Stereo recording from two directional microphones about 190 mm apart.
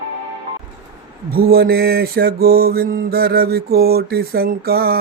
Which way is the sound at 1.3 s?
55° right (ahead or behind).